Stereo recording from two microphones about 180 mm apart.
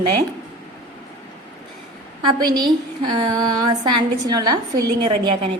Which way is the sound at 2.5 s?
25° right (ahead or behind).